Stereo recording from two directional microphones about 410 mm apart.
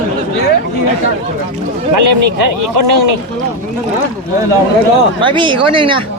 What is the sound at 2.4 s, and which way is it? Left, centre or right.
Speech, right.